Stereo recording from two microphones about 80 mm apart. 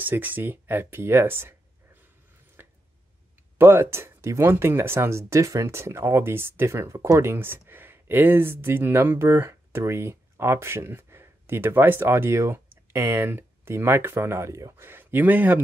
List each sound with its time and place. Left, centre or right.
0.0 s speech: right
2.6 s a sound: right
3.5 s speech: right
14.9 s speech: right